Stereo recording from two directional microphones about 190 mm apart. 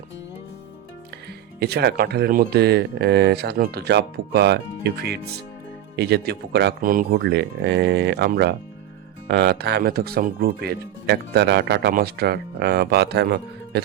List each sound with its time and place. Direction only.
1.5 s speech: 60° right (ahead or behind)